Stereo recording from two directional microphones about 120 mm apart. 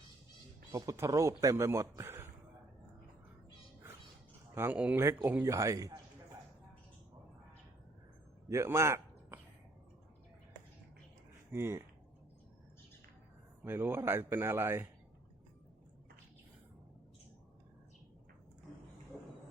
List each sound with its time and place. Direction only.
0.7 s speech: 25° right (ahead or behind)
4.5 s speech: 20° right (ahead or behind)
8.4 s a sound: 20° right (ahead or behind)
11.5 s speech: 20° right (ahead or behind)
13.7 s speech: 20° right (ahead or behind)